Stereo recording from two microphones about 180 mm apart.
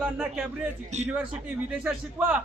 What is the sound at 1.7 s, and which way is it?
Speech, 5° right (ahead or behind).